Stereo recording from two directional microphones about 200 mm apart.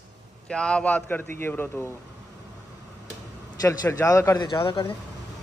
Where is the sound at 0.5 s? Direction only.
5° left (ahead or behind).